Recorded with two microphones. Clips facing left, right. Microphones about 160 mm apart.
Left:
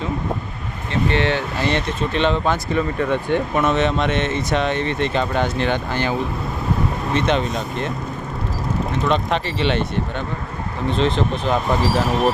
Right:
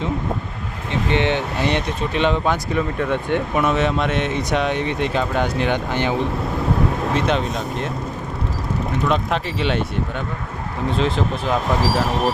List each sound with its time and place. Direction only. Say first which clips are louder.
1.1 s speech: right 4 dB; 15° right (ahead or behind)
5.9 s speech: right 1 dB; 20° right (ahead or behind)
7.1 s speech: left 1 dB; centre (ahead or behind)
9.0 s speech: left 1 dB; 5° right (ahead or behind)
10.8 s speech: left 1 dB; 5° right (ahead or behind)